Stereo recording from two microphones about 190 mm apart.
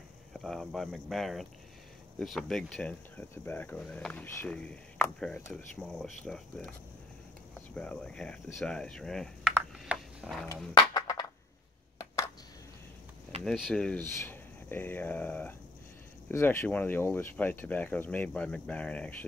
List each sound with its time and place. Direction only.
0.3 s speech: centre (ahead or behind)
10.9 s a sound: 20° left (ahead or behind)
13.4 s speech: centre (ahead or behind)